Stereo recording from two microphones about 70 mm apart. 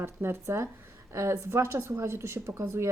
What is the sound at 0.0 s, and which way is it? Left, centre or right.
Speech, right.